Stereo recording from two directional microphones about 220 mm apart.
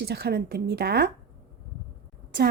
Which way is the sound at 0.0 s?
45° right (ahead or behind).